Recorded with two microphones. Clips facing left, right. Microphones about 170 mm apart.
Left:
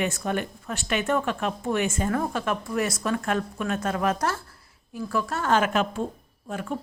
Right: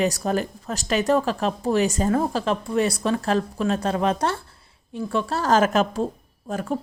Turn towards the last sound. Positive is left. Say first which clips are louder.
# right 4 dB
turn(degrees=-40)  # may be behind; listen again after turning